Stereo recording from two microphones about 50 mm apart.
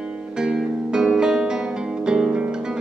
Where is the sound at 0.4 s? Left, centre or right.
Centre.